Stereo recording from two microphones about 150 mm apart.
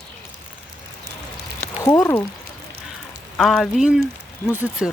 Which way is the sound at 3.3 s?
Centre (ahead or behind).